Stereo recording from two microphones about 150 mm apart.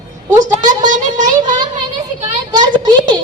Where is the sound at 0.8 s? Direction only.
60° right (ahead or behind).